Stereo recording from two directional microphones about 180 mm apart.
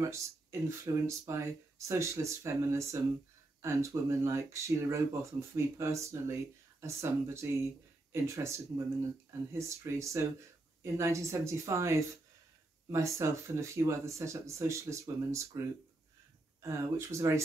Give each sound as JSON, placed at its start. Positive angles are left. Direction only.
{"t": 0.0, "sound": "speech", "side_deg": -15}
{"t": 16.6, "sound": "speech", "side_deg": -15}